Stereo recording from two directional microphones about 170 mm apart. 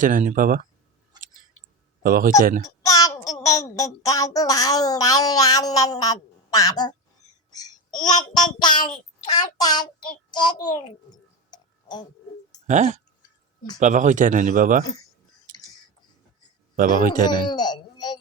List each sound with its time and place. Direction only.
0.0 s a man's voice: 50° right (ahead or behind)
1.1 s a sound: 25° right (ahead or behind)
2.0 s a man's voice: 55° right (ahead or behind)
2.8 s a child's voice: 20° left (ahead or behind)
7.9 s speech: 25° left (ahead or behind)
11.5 s tick-tock: 25° left (ahead or behind)
12.6 s a man's voice: 45° right (ahead or behind)
16.7 s a man's voice: 50° right (ahead or behind)
17.2 s speech: 25° left (ahead or behind)